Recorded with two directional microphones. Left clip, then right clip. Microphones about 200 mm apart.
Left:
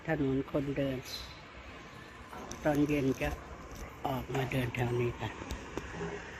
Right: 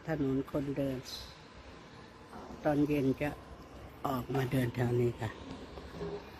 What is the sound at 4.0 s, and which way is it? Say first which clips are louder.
Speech: even; 30° right (ahead or behind).